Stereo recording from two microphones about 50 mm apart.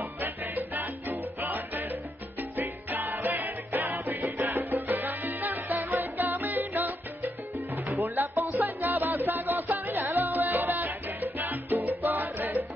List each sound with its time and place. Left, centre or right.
0.0 s salsa music: right
2.5 s music: right
4.8 s music: right
6.7 s salsa music: right
7.7 s music: right